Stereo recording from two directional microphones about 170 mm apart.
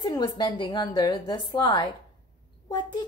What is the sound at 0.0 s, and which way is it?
A child's voice, 25° left (ahead or behind).